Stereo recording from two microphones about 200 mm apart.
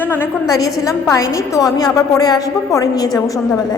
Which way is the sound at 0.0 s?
10° left (ahead or behind).